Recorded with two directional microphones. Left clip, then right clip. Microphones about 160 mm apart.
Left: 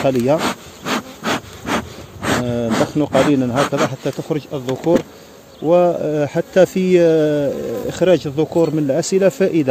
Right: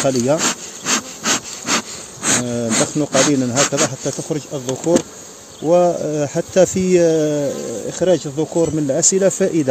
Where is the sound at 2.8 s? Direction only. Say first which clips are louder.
Left 1 dB; centre (ahead or behind).